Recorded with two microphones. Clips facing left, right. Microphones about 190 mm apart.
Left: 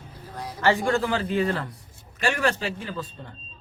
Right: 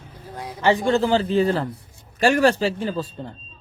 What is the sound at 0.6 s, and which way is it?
A man's voice, 20° right (ahead or behind).